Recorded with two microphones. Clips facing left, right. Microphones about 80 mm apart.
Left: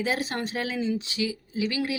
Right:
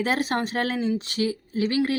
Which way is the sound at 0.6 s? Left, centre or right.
Right.